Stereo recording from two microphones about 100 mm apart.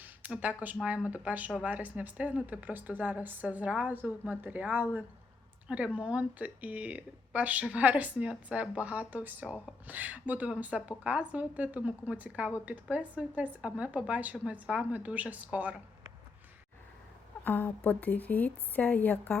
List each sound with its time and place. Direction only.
0.3 s speech: 15° right (ahead or behind)
17.4 s a woman's voice: 20° left (ahead or behind)